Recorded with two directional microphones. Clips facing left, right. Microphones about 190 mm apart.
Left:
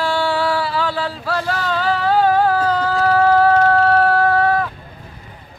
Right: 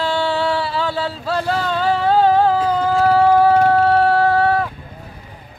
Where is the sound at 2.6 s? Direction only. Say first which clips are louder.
Right 1 dB; 10° right (ahead or behind).